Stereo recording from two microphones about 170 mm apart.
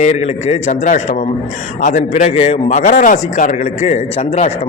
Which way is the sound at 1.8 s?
50° left (ahead or behind).